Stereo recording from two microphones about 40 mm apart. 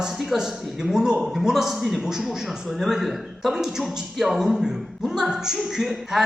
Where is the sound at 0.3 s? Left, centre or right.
Centre.